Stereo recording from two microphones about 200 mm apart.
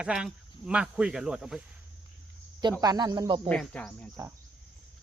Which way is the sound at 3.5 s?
5° left (ahead or behind).